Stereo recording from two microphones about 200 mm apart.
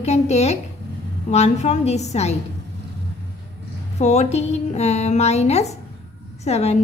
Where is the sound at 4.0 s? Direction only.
35° left (ahead or behind).